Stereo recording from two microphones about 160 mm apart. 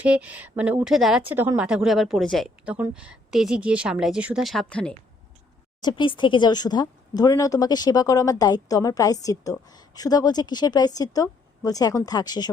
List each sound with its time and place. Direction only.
0.0 s a woman's voice: 10° right (ahead or behind)
5.8 s speech: 30° left (ahead or behind)